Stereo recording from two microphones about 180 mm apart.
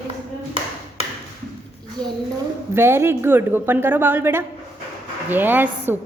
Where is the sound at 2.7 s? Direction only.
15° right (ahead or behind).